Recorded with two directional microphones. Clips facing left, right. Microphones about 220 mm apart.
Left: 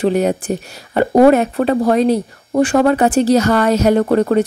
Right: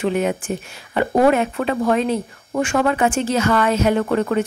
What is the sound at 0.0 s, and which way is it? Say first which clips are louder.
Speech: left 5 dB; 40° left (ahead or behind).